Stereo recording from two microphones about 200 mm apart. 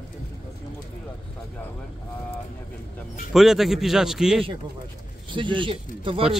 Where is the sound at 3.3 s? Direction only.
Centre (ahead or behind).